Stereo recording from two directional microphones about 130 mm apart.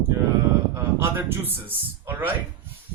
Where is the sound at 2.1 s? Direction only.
15° right (ahead or behind).